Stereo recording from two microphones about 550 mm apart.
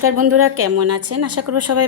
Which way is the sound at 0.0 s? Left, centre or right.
Right.